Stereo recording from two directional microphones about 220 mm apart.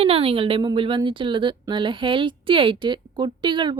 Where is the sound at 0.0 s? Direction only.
25° right (ahead or behind).